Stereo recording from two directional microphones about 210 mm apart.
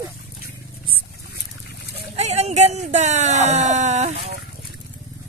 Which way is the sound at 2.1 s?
30° right (ahead or behind).